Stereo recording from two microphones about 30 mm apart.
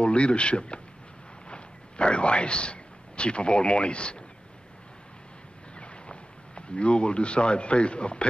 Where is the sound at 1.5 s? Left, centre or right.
Left.